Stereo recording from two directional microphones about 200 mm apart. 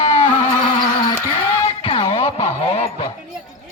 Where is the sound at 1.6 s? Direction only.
30° left (ahead or behind).